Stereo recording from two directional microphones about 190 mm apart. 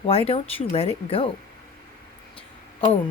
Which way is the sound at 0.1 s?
30° left (ahead or behind).